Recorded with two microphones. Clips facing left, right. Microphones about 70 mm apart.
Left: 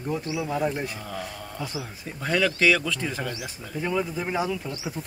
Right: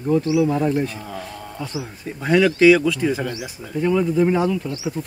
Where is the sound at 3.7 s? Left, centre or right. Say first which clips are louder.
Right 9 dB; centre.